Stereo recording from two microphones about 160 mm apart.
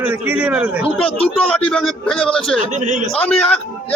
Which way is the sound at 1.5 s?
5° left (ahead or behind).